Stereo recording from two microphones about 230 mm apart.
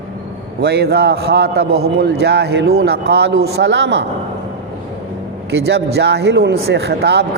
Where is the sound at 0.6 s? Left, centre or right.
Right.